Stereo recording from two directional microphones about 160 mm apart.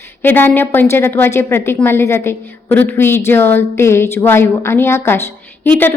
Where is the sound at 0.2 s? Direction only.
10° left (ahead or behind).